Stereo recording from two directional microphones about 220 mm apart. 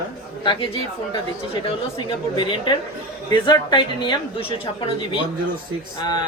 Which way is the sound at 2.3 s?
20° left (ahead or behind).